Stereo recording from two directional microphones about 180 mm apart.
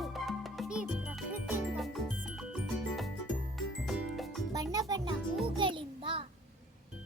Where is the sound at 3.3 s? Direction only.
Centre (ahead or behind).